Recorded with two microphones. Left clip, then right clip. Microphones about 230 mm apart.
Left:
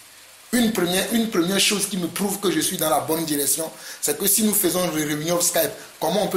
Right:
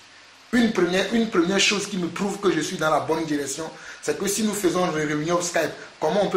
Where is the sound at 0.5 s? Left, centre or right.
Left.